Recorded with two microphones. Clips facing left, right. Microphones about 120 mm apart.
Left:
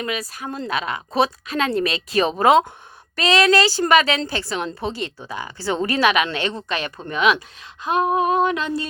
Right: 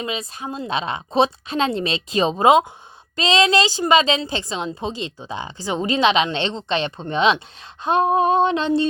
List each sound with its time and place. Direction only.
0.0 s a woman's voice: 25° right (ahead or behind)